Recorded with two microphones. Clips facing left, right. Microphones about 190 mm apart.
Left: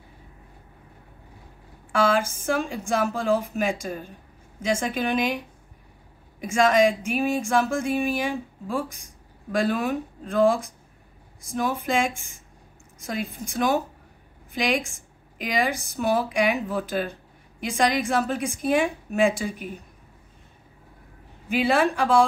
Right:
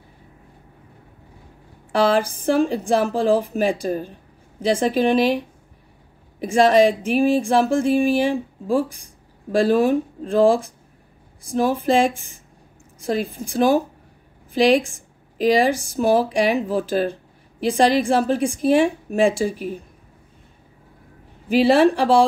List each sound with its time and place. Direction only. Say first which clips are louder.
1.9 s speech: right 4 dB; 35° right (ahead or behind)
6.4 s a woman's voice: right 5 dB; 30° right (ahead or behind)
21.5 s speech: right 7 dB; 35° right (ahead or behind)